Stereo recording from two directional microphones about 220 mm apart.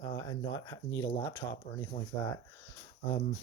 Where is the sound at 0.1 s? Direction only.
15° left (ahead or behind).